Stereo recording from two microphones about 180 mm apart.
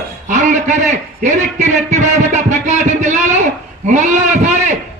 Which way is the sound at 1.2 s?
40° right (ahead or behind).